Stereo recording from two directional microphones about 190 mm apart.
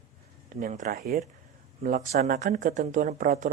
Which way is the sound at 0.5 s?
40° right (ahead or behind).